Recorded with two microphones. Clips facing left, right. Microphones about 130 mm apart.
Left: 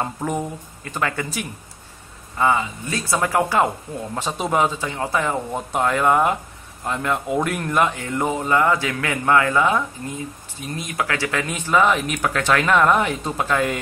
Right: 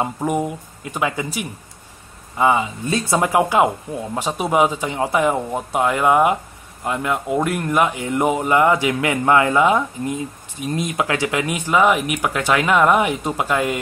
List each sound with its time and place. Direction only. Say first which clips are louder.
0.0 s speech: right 4 dB; 15° right (ahead or behind)